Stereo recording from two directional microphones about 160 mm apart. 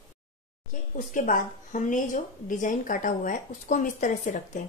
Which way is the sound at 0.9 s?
55° left (ahead or behind).